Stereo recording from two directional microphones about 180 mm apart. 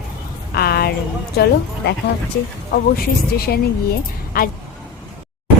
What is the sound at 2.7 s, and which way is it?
Speech, 55° left (ahead or behind).